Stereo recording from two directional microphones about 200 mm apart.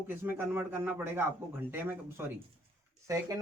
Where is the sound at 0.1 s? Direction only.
10° right (ahead or behind).